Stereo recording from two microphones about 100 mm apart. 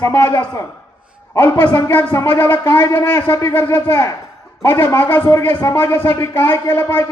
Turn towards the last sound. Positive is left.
turn(degrees=25)  # may be behind; listen again after turning